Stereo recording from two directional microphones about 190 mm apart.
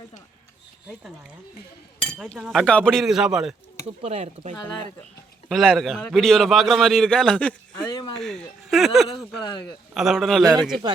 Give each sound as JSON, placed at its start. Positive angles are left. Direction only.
{"t": 2.4, "sound": "a man's voice", "side_deg": 0}
{"t": 3.8, "sound": "speech", "side_deg": -35}
{"t": 5.5, "sound": "a man's voice", "side_deg": 0}
{"t": 7.9, "sound": "speech", "side_deg": 20}
{"t": 8.1, "sound": "a man's voice", "side_deg": 0}